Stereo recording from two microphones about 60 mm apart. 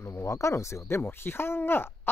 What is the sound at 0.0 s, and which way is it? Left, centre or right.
Speech, left.